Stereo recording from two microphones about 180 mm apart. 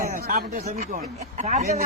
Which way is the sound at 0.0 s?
50° right (ahead or behind).